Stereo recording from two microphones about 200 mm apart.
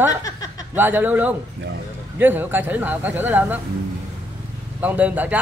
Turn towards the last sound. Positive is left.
turn(degrees=-5)  # may be behind; listen again after turning